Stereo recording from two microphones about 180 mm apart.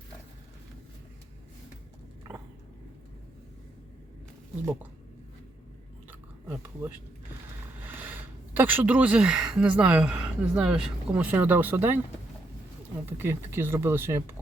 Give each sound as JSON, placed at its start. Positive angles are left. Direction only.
{"t": 7.9, "sound": "speech", "side_deg": -10}
{"t": 13.1, "sound": "speech", "side_deg": -10}